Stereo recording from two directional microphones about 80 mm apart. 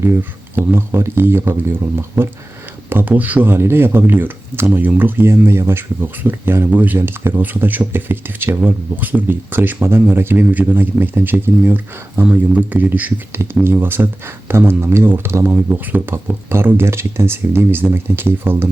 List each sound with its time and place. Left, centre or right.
0.0 s speech: right